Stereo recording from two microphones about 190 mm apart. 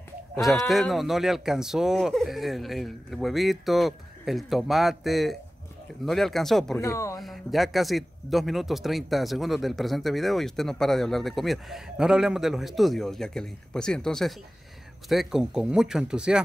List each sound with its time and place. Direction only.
0.7 s a man's voice: centre (ahead or behind)
6.8 s speech: 15° left (ahead or behind)
7.2 s a man's voice: centre (ahead or behind)